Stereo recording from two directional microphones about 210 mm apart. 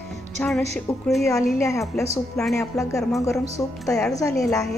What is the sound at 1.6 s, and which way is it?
Speech, 15° left (ahead or behind).